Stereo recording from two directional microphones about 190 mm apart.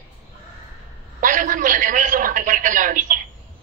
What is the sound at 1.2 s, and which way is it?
A man's voice, 45° right (ahead or behind).